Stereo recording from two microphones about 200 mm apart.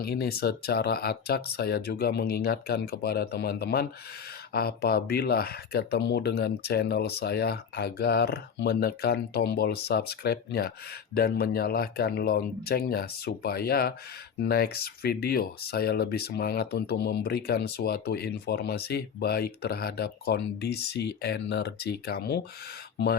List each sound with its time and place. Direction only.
0.0 s speech: 50° left (ahead or behind)